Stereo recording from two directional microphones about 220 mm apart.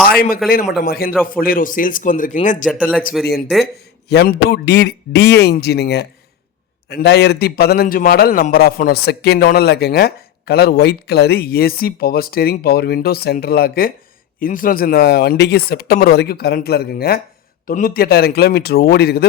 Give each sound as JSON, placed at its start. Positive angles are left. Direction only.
{"t": 0.1, "sound": "a man's voice", "side_deg": 40}
{"t": 2.6, "sound": "speech", "side_deg": -5}
{"t": 3.2, "sound": "a man's voice", "side_deg": 45}